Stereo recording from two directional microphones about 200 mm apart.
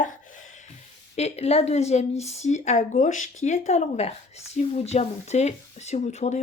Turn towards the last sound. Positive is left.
turn(degrees=35)  # may be behind; listen again after turning